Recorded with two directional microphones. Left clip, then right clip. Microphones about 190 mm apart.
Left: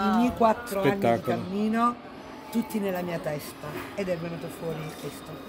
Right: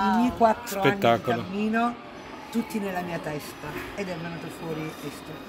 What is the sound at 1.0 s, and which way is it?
Speech, 5° left (ahead or behind).